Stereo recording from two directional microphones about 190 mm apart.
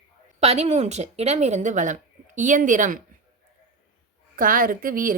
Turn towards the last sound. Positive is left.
turn(degrees=-45)  # may be behind; listen again after turning